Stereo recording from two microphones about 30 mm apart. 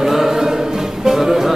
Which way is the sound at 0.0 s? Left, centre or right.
Centre.